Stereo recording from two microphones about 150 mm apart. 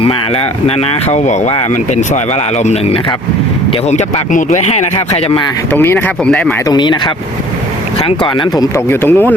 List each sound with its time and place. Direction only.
1.1 s speech: 55° left (ahead or behind)
3.8 s speech: 55° left (ahead or behind)
5.7 s speech: 15° left (ahead or behind)
6.7 s speech: 30° left (ahead or behind)
8.0 s speech: 30° left (ahead or behind); by 9.3 s 15° left (ahead or behind)